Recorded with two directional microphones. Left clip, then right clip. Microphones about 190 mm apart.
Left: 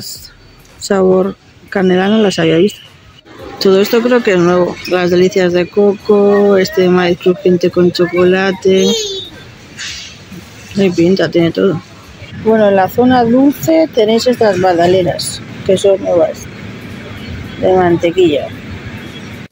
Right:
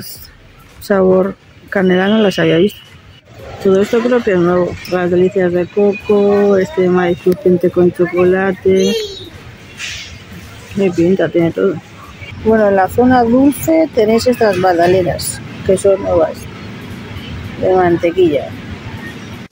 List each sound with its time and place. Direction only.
0.8 s speech: 5° left (ahead or behind)
3.6 s speech: 20° left (ahead or behind)
7.7 s speech: 5° left (ahead or behind)
10.8 s speech: 15° left (ahead or behind)
12.4 s speech: 5° left (ahead or behind)
17.6 s speech: 5° left (ahead or behind)